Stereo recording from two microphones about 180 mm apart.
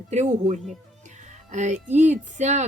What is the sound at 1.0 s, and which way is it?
Music, 40° right (ahead or behind).